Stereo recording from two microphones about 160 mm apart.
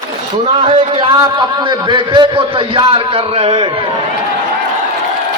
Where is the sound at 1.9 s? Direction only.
30° right (ahead or behind).